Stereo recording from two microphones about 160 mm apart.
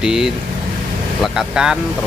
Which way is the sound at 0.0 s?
5° right (ahead or behind).